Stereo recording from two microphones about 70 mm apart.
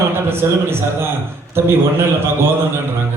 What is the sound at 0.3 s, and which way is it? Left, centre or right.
A man's voice, right.